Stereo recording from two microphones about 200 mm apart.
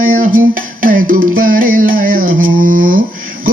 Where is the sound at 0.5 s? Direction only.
45° right (ahead or behind).